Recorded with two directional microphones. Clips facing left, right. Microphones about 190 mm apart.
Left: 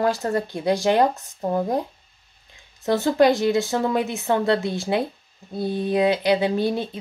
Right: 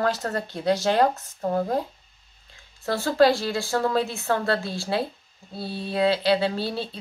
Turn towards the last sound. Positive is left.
turn(degrees=15)  # may be behind; listen again after turning